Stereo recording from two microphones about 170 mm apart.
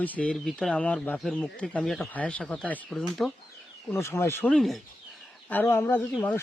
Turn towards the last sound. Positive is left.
turn(degrees=10)  # may be behind; listen again after turning